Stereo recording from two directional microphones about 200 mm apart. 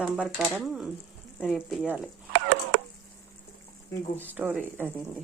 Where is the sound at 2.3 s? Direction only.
60° right (ahead or behind).